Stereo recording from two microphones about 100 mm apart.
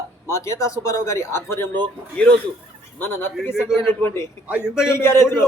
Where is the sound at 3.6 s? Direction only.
5° right (ahead or behind).